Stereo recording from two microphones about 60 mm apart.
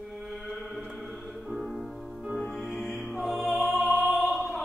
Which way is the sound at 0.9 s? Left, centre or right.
Centre.